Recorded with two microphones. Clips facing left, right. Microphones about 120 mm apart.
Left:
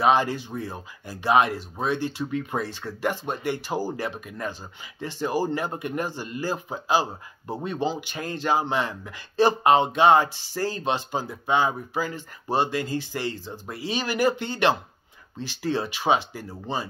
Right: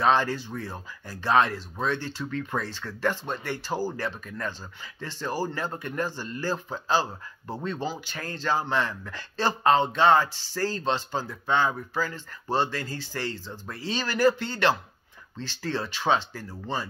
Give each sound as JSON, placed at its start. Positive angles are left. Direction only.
{"t": 0.0, "sound": "speech", "side_deg": 15}